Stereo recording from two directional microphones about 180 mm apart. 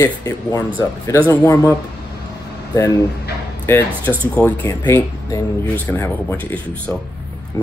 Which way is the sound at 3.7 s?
10° left (ahead or behind).